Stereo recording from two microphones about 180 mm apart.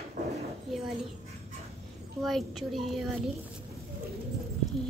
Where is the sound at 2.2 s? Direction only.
Centre (ahead or behind).